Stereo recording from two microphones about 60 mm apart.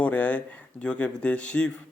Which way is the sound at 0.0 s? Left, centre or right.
Left.